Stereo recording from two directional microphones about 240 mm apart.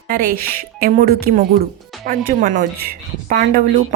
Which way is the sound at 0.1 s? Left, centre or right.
Right.